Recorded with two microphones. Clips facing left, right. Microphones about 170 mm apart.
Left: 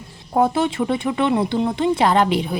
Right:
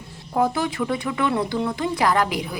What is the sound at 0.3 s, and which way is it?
A woman's voice, 25° left (ahead or behind).